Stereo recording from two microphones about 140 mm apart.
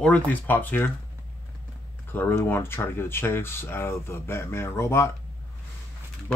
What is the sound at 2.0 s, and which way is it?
Speech, 15° left (ahead or behind).